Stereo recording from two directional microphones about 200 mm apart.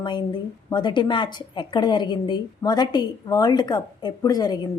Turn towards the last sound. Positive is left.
turn(degrees=20)  # may be behind; listen again after turning